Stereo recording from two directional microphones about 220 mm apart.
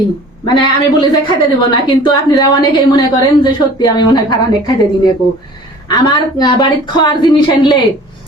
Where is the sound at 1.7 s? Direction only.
20° left (ahead or behind).